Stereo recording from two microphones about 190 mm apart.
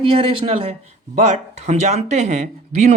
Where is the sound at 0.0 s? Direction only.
25° right (ahead or behind).